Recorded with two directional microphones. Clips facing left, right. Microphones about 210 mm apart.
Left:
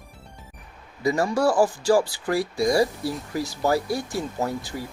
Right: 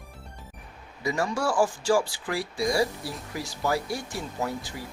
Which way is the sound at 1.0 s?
35° left (ahead or behind).